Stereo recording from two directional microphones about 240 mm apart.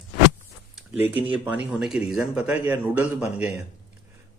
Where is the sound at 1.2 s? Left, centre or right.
Centre.